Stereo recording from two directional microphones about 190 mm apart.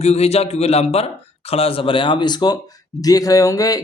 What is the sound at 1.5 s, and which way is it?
Speech, 30° left (ahead or behind).